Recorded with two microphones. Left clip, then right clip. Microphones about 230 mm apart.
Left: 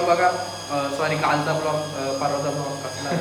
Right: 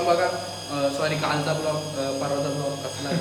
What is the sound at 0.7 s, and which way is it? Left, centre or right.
A man's voice, centre.